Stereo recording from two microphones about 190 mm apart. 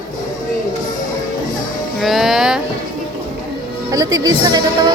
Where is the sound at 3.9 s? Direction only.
20° right (ahead or behind).